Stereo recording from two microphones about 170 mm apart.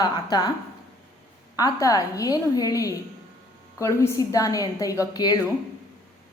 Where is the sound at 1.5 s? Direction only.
20° left (ahead or behind).